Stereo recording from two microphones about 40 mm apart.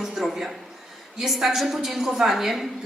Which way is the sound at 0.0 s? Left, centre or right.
Centre.